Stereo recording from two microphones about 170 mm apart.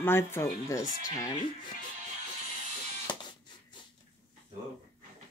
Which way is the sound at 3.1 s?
25° left (ahead or behind).